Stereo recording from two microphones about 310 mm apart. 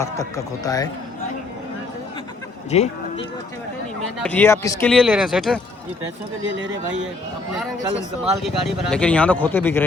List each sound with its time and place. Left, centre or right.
0.0 s speech: centre
2.6 s speech: left
4.2 s speech: centre
8.2 s speech: centre